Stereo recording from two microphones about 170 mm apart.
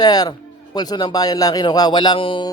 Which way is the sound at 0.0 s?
25° left (ahead or behind).